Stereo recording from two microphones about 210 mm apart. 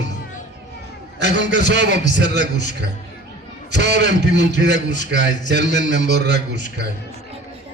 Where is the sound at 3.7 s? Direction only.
55° right (ahead or behind).